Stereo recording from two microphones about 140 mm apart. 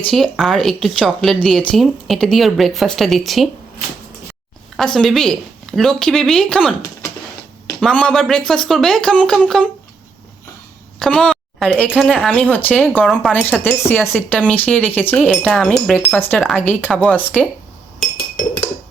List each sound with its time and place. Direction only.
0.1 s speech: centre (ahead or behind)
4.8 s speech: centre (ahead or behind)
7.8 s speech: 5° left (ahead or behind)
11.0 s a woman's voice: 5° left (ahead or behind)
11.9 s wind chime: 5° left (ahead or behind)
13.0 s speech: 5° right (ahead or behind)
13.6 s wind chime: 15° left (ahead or behind)